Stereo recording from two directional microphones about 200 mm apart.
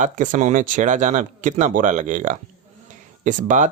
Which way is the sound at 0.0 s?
40° right (ahead or behind).